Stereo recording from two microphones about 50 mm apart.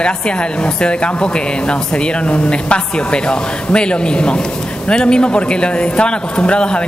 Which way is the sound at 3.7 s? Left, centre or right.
Centre.